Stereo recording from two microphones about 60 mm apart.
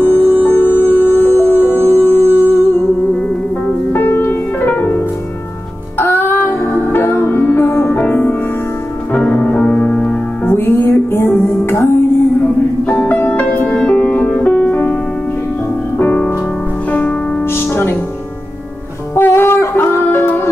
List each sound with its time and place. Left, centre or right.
0.0 s music: left
3.9 s music: left
10.4 s music: left
12.8 s music: left
16.0 s music: left
17.6 s music: left
19.1 s music: left
20.0 s music: left